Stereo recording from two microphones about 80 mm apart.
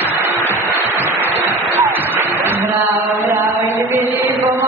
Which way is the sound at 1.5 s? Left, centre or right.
Right.